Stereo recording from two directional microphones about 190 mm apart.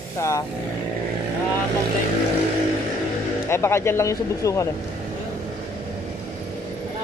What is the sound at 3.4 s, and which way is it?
Speech, 15° left (ahead or behind).